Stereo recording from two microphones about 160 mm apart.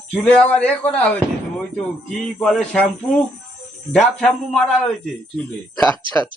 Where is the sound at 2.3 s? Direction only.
5° left (ahead or behind).